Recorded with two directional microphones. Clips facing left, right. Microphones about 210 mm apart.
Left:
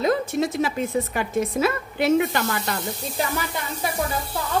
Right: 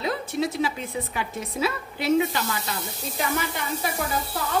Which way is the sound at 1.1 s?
55° left (ahead or behind).